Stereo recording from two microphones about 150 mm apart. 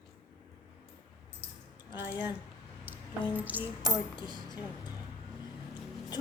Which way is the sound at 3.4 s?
10° right (ahead or behind).